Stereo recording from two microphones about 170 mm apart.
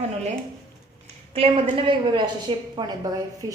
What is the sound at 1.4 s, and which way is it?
A woman's voice, 35° right (ahead or behind).